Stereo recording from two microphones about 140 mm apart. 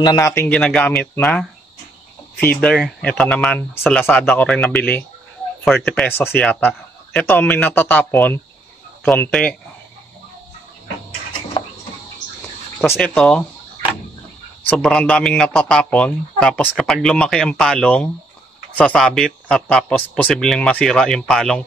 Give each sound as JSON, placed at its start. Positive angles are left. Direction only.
{"t": 0.0, "sound": "speech", "side_deg": 25}
{"t": 2.4, "sound": "speech", "side_deg": 10}
{"t": 13.0, "sound": "speech", "side_deg": 5}
{"t": 14.7, "sound": "speech", "side_deg": 5}